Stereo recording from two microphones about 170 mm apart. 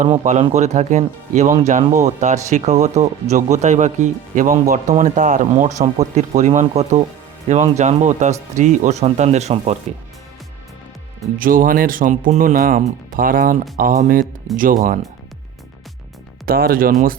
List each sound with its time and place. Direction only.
0.5 s speech: 40° right (ahead or behind)
11.3 s speech: 55° right (ahead or behind)
16.5 s speech: 60° right (ahead or behind)